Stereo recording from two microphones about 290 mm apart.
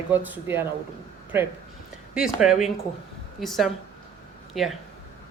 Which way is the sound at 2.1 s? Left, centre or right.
Centre.